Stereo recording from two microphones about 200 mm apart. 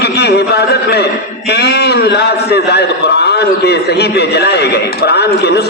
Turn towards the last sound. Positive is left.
turn(degrees=55)  # may be behind; listen again after turning